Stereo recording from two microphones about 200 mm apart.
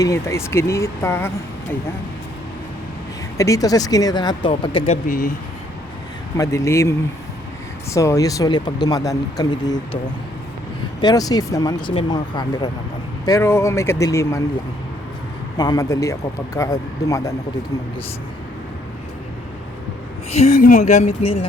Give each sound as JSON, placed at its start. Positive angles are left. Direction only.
{"t": 0.0, "sound": "speech", "side_deg": 15}
{"t": 3.3, "sound": "speech", "side_deg": 15}
{"t": 5.0, "sound": "speech", "side_deg": 45}
{"t": 6.3, "sound": "speech", "side_deg": 15}
{"t": 11.0, "sound": "speech", "side_deg": 20}
{"t": 15.5, "sound": "speech", "side_deg": 20}
{"t": 20.3, "sound": "speech", "side_deg": 35}